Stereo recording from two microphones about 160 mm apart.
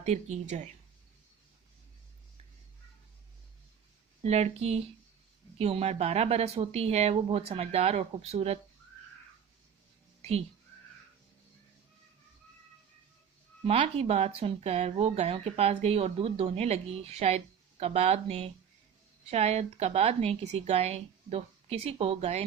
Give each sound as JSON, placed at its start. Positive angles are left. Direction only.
{"t": 0.0, "sound": "speech", "side_deg": -45}
{"t": 4.2, "sound": "speech", "side_deg": -40}
{"t": 13.7, "sound": "speech", "side_deg": -40}